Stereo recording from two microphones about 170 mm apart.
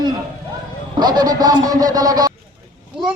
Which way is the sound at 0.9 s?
25° right (ahead or behind).